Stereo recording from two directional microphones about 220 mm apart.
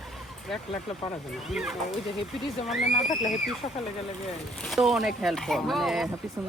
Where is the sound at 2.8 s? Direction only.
30° left (ahead or behind).